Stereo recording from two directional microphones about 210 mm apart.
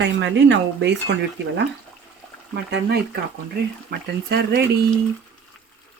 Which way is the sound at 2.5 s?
50° right (ahead or behind).